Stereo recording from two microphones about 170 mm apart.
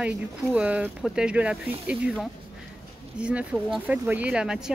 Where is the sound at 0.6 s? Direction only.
10° right (ahead or behind).